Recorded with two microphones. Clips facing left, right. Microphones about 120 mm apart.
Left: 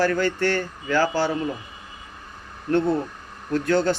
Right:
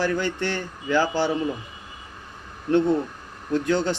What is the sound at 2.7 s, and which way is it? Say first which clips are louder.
Speech: right 1 dB; 25° right (ahead or behind).